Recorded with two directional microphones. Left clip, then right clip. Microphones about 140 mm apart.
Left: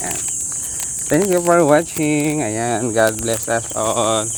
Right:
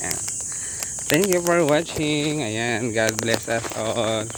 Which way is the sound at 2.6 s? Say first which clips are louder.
Left 6 dB; centre (ahead or behind).